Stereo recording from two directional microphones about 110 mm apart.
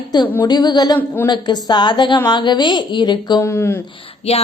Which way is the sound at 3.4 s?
20° left (ahead or behind).